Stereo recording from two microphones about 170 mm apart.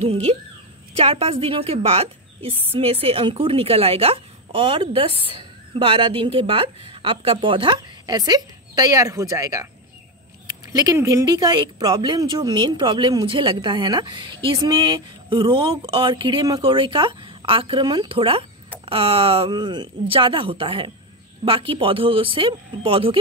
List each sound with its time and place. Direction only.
0.0 s a woman's voice: 35° right (ahead or behind); by 9.7 s 20° right (ahead or behind)
10.7 s a woman's voice: 20° right (ahead or behind)